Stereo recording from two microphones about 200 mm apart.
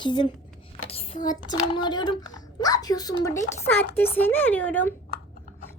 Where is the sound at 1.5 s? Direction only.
20° left (ahead or behind).